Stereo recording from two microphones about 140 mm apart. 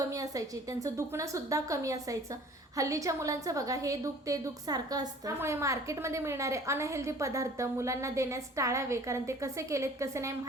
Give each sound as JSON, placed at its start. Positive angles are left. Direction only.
{"t": 0.1, "sound": "a woman's voice", "side_deg": -25}